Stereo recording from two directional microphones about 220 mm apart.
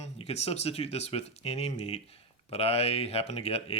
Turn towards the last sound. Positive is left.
turn(degrees=25)  # may be behind; listen again after turning